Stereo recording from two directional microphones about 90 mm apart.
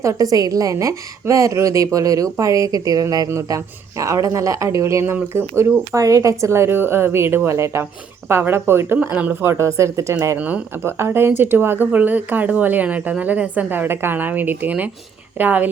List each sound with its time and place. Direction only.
0.0 s a woman's voice: 40° right (ahead or behind)
3.2 s a woman's voice: 35° right (ahead or behind)
9.0 s speech: 15° right (ahead or behind)
9.4 s a woman's voice: 30° right (ahead or behind)
10.3 s speech: 15° right (ahead or behind)
10.8 s speech: 25° right (ahead or behind)